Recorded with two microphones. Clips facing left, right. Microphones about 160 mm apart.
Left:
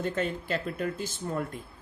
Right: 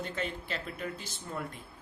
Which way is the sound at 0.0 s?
45° left (ahead or behind).